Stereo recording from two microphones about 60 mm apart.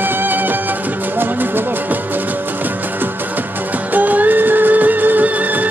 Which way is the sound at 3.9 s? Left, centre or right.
Right.